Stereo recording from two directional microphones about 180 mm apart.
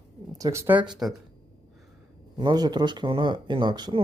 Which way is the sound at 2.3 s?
25° right (ahead or behind).